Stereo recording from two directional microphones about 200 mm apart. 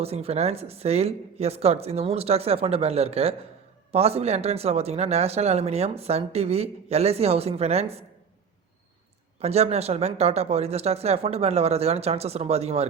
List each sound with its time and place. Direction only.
0.0 s speech: 30° right (ahead or behind)
9.4 s speech: 30° right (ahead or behind)